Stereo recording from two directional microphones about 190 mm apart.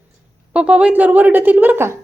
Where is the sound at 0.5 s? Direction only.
5° right (ahead or behind).